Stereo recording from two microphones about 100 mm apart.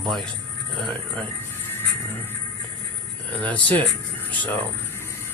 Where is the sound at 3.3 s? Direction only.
15° left (ahead or behind).